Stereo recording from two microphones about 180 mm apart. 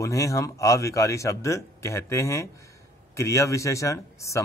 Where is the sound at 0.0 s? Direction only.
20° left (ahead or behind).